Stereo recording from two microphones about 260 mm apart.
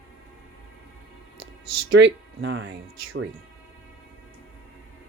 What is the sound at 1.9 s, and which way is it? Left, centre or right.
Speech, right.